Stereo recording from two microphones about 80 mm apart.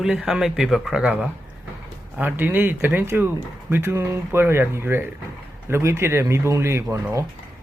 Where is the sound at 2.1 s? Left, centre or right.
Right.